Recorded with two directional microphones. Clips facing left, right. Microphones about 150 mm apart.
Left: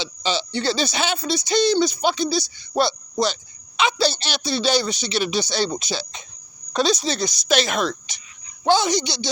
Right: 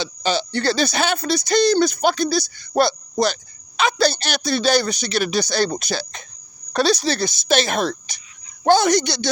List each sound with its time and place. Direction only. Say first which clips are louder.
0.0 s speech: right 3 dB; 45° right (ahead or behind)
6.7 s speech: right 2 dB; 65° right (ahead or behind)
7.3 s speech: left 1 dB; 25° right (ahead or behind)
8.6 s speech: right 4 dB; 50° right (ahead or behind)